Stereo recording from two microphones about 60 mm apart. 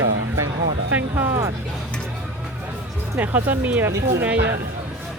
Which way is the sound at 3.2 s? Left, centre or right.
Right.